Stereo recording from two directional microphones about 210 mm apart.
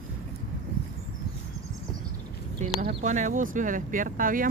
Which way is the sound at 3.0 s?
35° right (ahead or behind).